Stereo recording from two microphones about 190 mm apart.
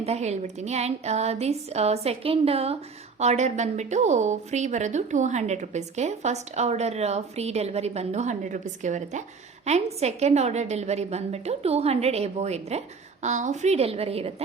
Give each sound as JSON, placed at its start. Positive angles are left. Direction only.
{"t": 0.0, "sound": "a woman's voice", "side_deg": -35}